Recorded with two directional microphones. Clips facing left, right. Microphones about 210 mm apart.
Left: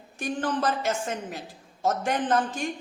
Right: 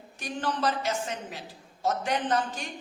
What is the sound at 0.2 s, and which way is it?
A man's voice, 50° left (ahead or behind).